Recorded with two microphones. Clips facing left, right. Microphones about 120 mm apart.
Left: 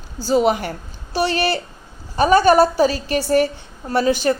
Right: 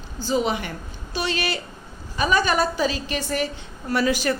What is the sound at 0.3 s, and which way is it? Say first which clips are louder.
A woman's voice: left 6 dB; 40° left (ahead or behind).